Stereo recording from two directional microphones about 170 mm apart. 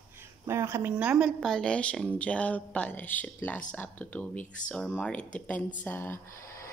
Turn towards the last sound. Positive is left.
turn(degrees=15)  # may be behind; listen again after turning